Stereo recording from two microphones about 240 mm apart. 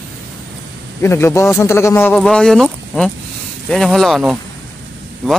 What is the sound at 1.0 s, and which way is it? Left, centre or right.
Speech, centre.